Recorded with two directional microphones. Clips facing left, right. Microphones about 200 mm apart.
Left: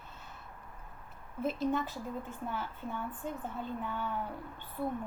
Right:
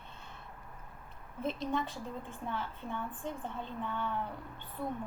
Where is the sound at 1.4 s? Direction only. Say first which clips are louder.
Left 3 dB; 5° left (ahead or behind).